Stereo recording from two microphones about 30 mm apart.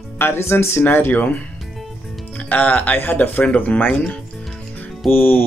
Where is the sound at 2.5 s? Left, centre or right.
Left.